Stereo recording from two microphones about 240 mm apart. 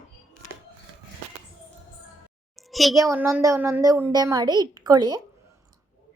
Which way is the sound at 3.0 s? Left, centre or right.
Centre.